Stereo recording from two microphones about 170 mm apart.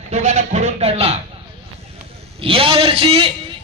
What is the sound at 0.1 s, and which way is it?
Speech, 40° right (ahead or behind).